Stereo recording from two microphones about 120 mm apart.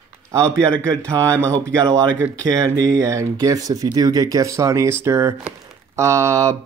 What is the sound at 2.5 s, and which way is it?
Speech, 30° right (ahead or behind).